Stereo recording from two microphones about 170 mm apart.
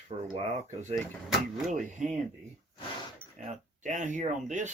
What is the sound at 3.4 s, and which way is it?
Speech, 45° right (ahead or behind).